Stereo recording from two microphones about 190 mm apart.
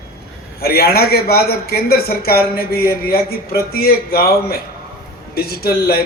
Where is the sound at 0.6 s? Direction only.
55° left (ahead or behind).